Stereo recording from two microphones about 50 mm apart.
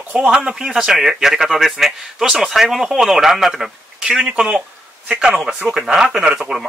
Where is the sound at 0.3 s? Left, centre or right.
Centre.